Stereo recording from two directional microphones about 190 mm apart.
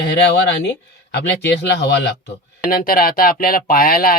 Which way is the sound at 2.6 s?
50° left (ahead or behind).